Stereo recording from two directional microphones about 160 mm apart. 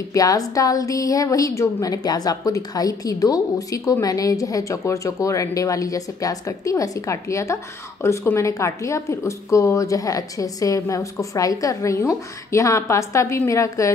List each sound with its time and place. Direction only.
0.1 s a woman's voice: 20° left (ahead or behind)